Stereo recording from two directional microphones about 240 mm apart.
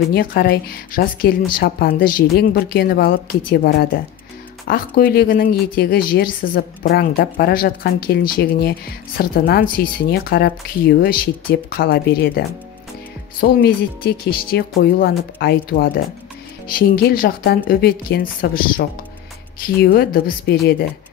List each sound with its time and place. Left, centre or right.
0.1 s speech: left